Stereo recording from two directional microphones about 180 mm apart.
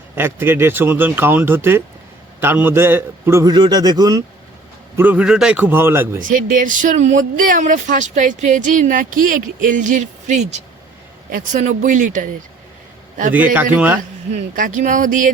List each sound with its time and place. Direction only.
0.2 s a man's voice: 10° right (ahead or behind)
4.9 s a man's voice: 10° right (ahead or behind)
6.1 s speech: 45° right (ahead or behind)
13.3 s a man's voice: 10° right (ahead or behind)
14.3 s speech: 45° right (ahead or behind)